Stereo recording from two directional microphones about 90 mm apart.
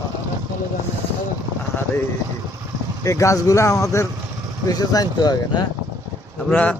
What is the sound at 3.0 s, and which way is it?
Speech, 35° left (ahead or behind).